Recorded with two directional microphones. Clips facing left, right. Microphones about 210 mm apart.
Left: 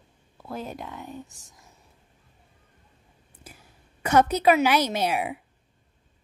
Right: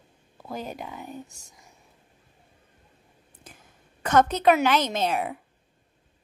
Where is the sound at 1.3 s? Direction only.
Centre (ahead or behind).